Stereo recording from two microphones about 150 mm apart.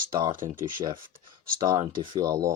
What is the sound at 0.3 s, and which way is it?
Speech, 65° right (ahead or behind).